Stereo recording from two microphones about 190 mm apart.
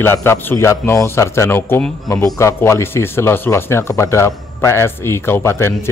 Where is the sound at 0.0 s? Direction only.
10° left (ahead or behind).